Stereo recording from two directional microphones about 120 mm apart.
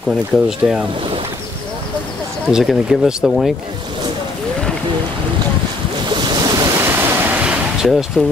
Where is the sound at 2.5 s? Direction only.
5° right (ahead or behind).